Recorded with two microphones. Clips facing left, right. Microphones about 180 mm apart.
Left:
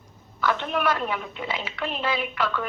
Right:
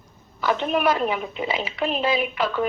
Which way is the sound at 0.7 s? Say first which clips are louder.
Right 4 dB; 15° right (ahead or behind).